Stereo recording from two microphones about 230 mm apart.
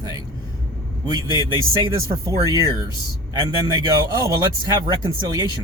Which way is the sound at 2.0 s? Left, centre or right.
Centre.